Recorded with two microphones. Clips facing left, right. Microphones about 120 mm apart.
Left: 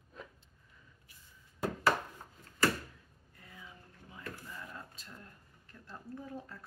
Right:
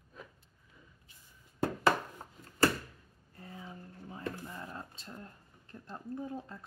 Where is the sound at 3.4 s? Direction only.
35° right (ahead or behind).